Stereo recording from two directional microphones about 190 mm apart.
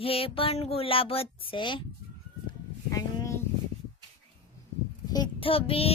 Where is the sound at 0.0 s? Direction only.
30° left (ahead or behind).